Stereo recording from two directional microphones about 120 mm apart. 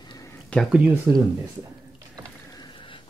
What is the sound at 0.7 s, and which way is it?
Speech, 15° right (ahead or behind).